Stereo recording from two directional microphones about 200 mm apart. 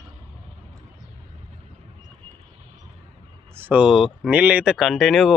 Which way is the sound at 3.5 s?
10° right (ahead or behind).